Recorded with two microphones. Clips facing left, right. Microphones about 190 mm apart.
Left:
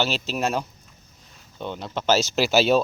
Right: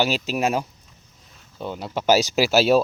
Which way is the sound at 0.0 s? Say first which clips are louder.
Right 3 dB; 10° right (ahead or behind).